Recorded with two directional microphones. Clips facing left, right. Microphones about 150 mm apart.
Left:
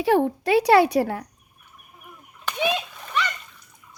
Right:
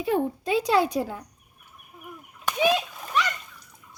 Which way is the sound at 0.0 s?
80° left.